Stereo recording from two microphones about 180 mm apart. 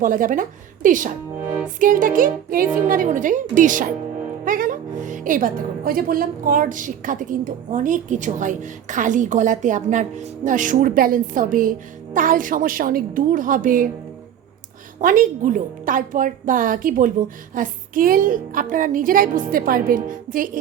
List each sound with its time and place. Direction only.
0.0 s a woman's voice: 50° right (ahead or behind)
15.0 s a woman's voice: 50° right (ahead or behind)